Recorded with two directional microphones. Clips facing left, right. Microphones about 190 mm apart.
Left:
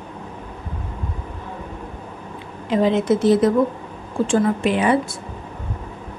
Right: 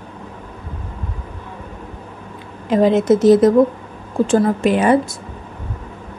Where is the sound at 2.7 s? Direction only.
45° right (ahead or behind).